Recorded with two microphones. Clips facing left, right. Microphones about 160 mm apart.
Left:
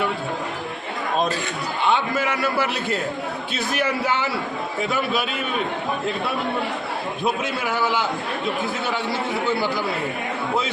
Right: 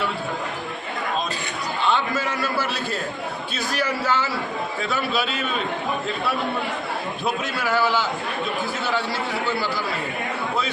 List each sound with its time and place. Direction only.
1.8 s a man's voice: 15° left (ahead or behind)
7.4 s a man's voice: 20° left (ahead or behind)